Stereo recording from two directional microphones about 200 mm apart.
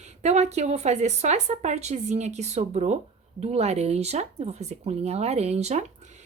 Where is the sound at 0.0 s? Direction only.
35° right (ahead or behind).